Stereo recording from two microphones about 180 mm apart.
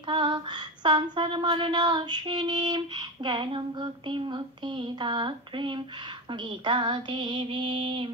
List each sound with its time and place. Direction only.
0.1 s female singing: 25° right (ahead or behind)